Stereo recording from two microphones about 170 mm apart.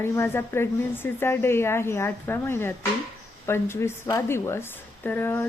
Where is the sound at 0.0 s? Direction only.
15° left (ahead or behind).